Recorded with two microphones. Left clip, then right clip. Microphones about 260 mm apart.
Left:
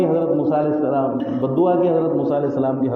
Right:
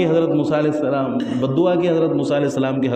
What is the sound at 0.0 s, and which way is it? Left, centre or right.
A man's voice, right.